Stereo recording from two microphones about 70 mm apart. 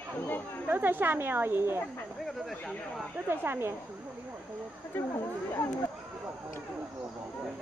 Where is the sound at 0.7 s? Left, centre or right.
Right.